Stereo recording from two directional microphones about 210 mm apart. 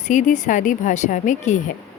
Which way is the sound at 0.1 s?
35° left (ahead or behind).